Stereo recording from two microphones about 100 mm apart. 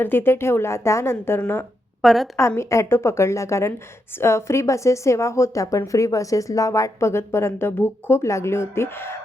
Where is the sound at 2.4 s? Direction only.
30° left (ahead or behind).